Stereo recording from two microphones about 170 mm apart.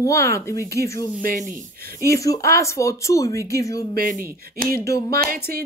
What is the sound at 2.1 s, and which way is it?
Speech, 20° left (ahead or behind).